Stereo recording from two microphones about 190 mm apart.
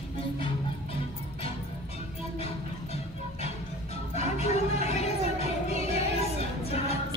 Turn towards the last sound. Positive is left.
turn(degrees=35)  # may be behind; listen again after turning